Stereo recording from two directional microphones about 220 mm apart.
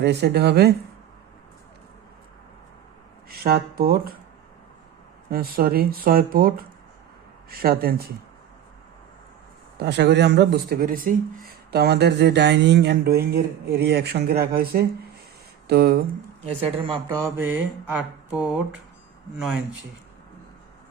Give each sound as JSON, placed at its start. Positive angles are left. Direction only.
{"t": 0.0, "sound": "speech", "side_deg": -50}
{"t": 3.2, "sound": "speech", "side_deg": -45}
{"t": 5.3, "sound": "speech", "side_deg": -45}
{"t": 9.7, "sound": "speech", "side_deg": -50}
{"t": 16.6, "sound": "speech", "side_deg": -25}